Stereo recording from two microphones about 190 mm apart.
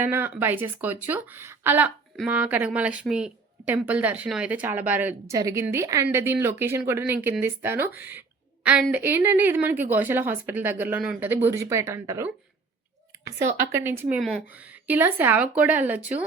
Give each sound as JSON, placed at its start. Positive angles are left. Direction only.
{"t": 0.0, "sound": "a woman's voice", "side_deg": -10}
{"t": 14.2, "sound": "speech", "side_deg": 5}
{"t": 14.5, "sound": "a woman's voice", "side_deg": -10}